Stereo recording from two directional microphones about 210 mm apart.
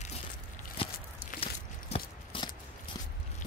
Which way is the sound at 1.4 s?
25° left (ahead or behind).